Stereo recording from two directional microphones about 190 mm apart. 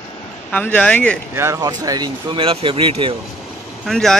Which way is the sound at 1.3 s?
15° right (ahead or behind).